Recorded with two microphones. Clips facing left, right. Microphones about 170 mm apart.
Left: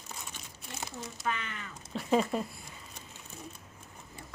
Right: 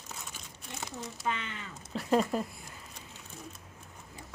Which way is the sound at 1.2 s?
20° right (ahead or behind).